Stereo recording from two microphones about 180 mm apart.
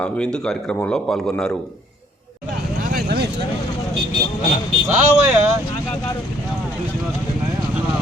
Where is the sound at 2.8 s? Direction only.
55° right (ahead or behind).